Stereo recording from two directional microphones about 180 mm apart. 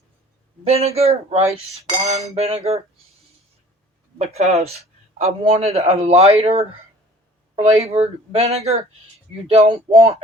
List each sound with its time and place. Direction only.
0.6 s speech: 35° right (ahead or behind)
4.2 s speech: 35° right (ahead or behind)